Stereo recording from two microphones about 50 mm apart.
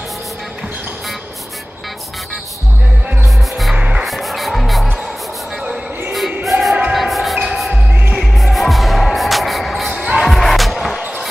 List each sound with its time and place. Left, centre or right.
3.7 s music: right
4.0 s music: centre
6.1 s a sound: centre
6.9 s basketball bounce: centre
8.2 s music: centre
9.9 s music: centre
10.2 s music: centre